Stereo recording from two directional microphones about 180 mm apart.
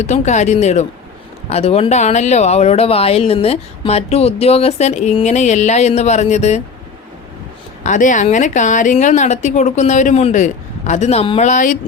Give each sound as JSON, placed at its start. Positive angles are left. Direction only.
{"t": 0.0, "sound": "speech", "side_deg": 40}
{"t": 7.9, "sound": "a woman's voice", "side_deg": 45}